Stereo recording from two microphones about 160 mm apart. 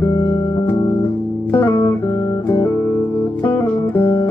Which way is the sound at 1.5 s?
15° left (ahead or behind).